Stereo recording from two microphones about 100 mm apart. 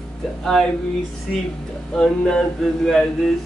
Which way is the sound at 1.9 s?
5° left (ahead or behind).